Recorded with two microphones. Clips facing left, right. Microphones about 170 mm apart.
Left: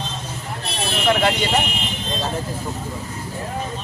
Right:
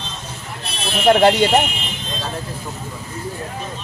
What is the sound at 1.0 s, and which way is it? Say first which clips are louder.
Speech: right 7 dB; 40° right (ahead or behind).